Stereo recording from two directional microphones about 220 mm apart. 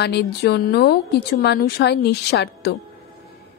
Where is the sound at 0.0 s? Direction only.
50° left (ahead or behind).